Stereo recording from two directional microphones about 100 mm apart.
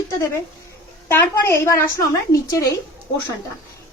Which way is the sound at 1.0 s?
25° left (ahead or behind).